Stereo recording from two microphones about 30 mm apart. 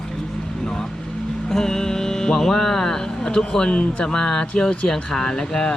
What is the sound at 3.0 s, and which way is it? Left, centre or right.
Speech, left.